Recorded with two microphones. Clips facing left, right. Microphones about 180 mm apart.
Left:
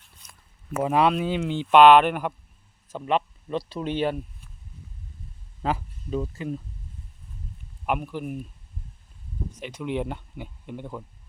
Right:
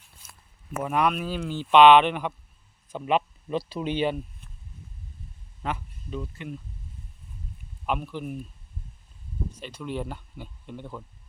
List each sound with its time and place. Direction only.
0.8 s speech: 25° left (ahead or behind)
1.7 s speech: 5° left (ahead or behind)
2.9 s speech: 5° right (ahead or behind)
5.6 s speech: 35° left (ahead or behind)
7.9 s speech: 10° left (ahead or behind)
9.6 s speech: 15° left (ahead or behind)